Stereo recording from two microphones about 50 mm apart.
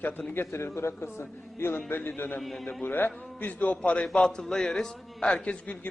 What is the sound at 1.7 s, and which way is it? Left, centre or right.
A woman's voice, left.